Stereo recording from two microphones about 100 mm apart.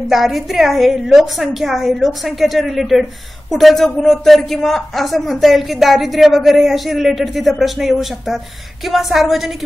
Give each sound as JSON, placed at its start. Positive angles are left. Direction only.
{"t": 0.1, "sound": "a man's voice", "side_deg": 0}